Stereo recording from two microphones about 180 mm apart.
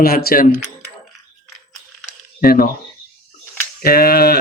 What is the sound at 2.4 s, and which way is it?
Speech, 55° left (ahead or behind).